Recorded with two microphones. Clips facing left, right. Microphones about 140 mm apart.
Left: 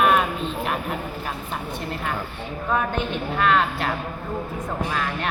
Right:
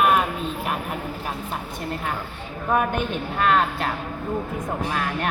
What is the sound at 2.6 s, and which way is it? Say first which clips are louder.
Speech: right 2 dB; 15° right (ahead or behind).